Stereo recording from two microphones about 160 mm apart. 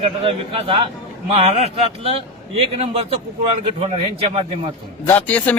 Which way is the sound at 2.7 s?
35° right (ahead or behind).